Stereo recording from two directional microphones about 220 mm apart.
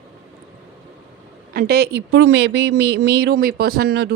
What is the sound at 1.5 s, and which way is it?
Speech, 45° right (ahead or behind).